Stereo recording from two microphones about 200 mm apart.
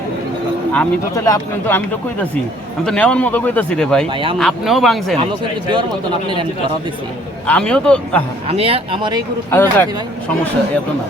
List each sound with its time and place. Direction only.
0.7 s a man's voice: 10° left (ahead or behind)
2.8 s a man's voice: 5° left (ahead or behind)
4.1 s speech: 25° right (ahead or behind)
4.4 s speech: centre (ahead or behind)
7.4 s speech: 5° left (ahead or behind)
8.4 s speech: 30° right (ahead or behind)
9.5 s a man's voice: 10° left (ahead or behind)